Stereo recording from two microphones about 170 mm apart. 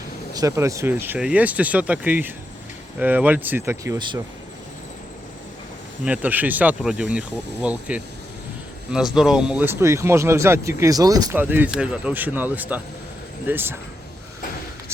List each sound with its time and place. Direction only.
0.3 s speech: 20° right (ahead or behind)
6.1 s speech: 10° right (ahead or behind)
11.3 s speech: 10° right (ahead or behind)